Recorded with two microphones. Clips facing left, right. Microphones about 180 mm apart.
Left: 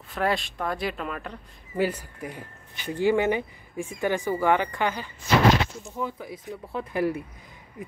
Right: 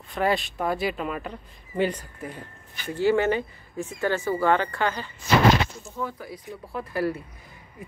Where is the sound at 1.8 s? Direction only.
10° left (ahead or behind).